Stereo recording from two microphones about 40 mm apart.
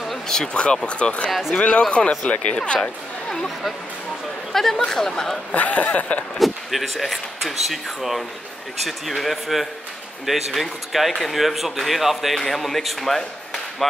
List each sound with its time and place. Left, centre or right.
0.5 s speech: left
4.5 s speech: centre
5.5 s speech: left
6.3 s a man's voice: centre